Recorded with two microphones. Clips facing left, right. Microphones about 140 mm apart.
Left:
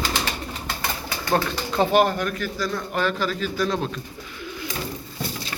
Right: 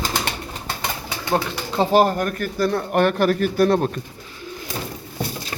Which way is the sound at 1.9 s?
40° right (ahead or behind).